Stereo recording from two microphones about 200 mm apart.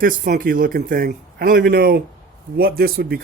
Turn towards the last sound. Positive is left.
turn(degrees=-50)  # may be behind; listen again after turning